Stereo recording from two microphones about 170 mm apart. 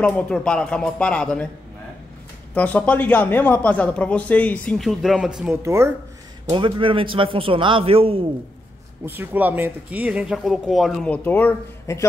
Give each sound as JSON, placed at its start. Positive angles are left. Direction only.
{"t": 0.0, "sound": "speech", "side_deg": 5}
{"t": 2.5, "sound": "speech", "side_deg": 10}
{"t": 5.6, "sound": "speech", "side_deg": -15}
{"t": 6.5, "sound": "a man's voice", "side_deg": -30}
{"t": 9.0, "sound": "speech", "side_deg": -15}